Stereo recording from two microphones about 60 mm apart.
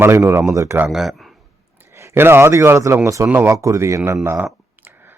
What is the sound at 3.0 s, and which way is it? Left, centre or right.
Speech, right.